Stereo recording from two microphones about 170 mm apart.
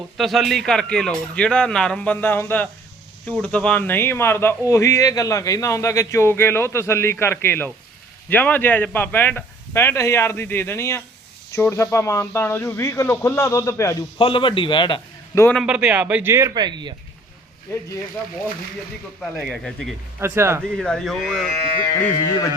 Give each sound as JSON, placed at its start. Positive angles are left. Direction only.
{"t": 0.2, "sound": "speech", "side_deg": 0}
{"t": 14.2, "sound": "a man's voice", "side_deg": 30}
{"t": 15.5, "sound": "speech", "side_deg": -5}
{"t": 17.7, "sound": "speech", "side_deg": 15}
{"t": 19.2, "sound": "speech", "side_deg": 0}
{"t": 20.1, "sound": "speech", "side_deg": -15}
{"t": 20.7, "sound": "speech", "side_deg": 5}
{"t": 21.9, "sound": "speech", "side_deg": 15}